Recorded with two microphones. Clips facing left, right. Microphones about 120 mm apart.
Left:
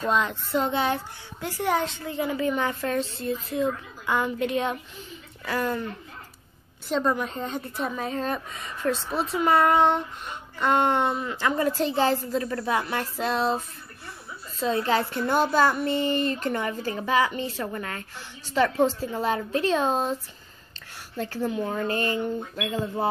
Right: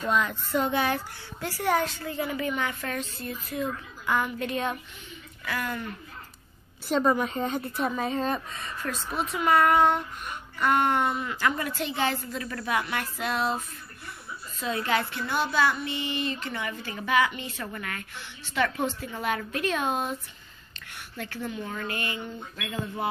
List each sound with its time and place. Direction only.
0.0 s a child's voice: 25° left (ahead or behind)
5.4 s speech: 30° left (ahead or behind)
6.9 s a woman's voice: 5° right (ahead or behind)
8.5 s speech: 15° left (ahead or behind)
8.9 s a child's voice: 30° left (ahead or behind)
14.6 s a child's voice: 30° left (ahead or behind)
21.2 s speech: 35° left (ahead or behind)
22.6 s a child's voice: 25° left (ahead or behind)